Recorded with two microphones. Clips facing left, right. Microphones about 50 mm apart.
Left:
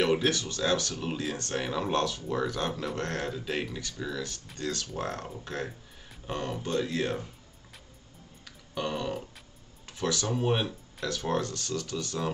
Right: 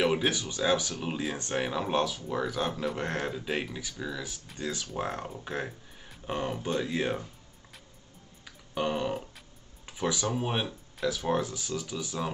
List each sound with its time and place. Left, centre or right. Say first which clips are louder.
0.0 s speech: left 1 dB; centre
8.5 s a sound: right 3 dB; centre
9.8 s speech: even; centre